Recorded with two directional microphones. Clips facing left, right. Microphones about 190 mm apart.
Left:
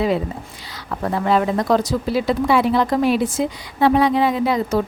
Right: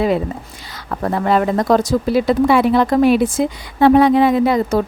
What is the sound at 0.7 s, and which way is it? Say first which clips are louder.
Speech: right 3 dB; 50° right (ahead or behind).